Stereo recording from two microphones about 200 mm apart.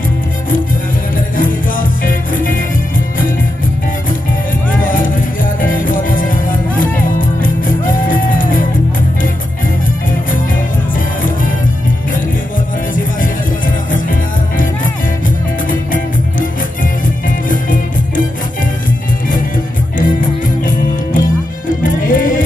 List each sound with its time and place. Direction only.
1.3 s music: 45° left (ahead or behind)
4.7 s music: 45° left (ahead or behind)
12.9 s music: 45° left (ahead or behind)
17.5 s music: 40° left (ahead or behind)
20.0 s music: 40° left (ahead or behind)